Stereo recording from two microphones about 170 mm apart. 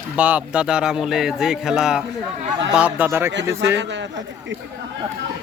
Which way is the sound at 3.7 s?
90° right.